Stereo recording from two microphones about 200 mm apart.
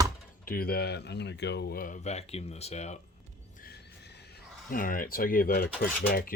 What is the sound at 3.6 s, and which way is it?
Horse, 55° left (ahead or behind).